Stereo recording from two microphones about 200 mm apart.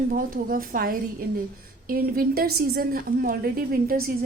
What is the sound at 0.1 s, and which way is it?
A woman's voice, 45° right (ahead or behind).